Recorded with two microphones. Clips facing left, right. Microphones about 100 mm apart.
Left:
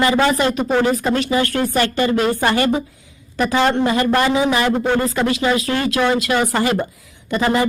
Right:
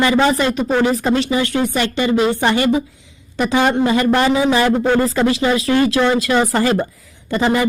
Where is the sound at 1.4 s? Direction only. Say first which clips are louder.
Even; 50° left (ahead or behind).